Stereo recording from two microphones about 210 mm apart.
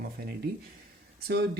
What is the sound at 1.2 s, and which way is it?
Speech, 50° right (ahead or behind).